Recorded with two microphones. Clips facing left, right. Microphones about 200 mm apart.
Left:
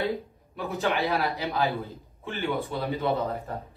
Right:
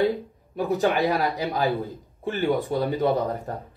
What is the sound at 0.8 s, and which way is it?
Speech, 15° right (ahead or behind).